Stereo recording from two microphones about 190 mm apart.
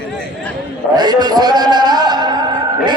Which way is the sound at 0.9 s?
20° right (ahead or behind).